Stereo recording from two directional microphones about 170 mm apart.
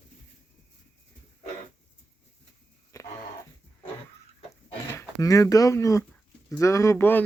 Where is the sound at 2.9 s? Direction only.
20° left (ahead or behind).